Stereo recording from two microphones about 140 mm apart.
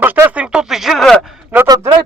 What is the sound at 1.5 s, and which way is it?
Speech, 10° right (ahead or behind).